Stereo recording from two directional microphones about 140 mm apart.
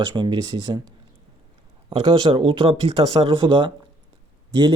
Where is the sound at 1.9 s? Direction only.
35° right (ahead or behind).